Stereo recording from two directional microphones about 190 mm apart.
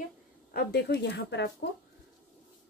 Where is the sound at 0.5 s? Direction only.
60° left (ahead or behind).